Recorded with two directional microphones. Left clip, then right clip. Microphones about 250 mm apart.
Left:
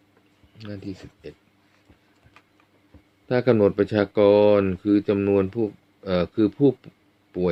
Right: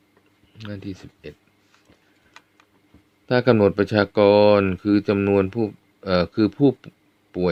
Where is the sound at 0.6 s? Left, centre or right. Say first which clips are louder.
Right 1 dB; right.